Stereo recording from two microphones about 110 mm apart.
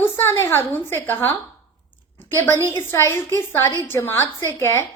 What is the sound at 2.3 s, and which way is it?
A woman's voice, 20° left (ahead or behind).